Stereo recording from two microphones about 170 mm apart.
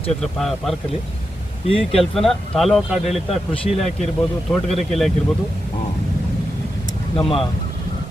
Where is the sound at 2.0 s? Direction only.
Centre (ahead or behind).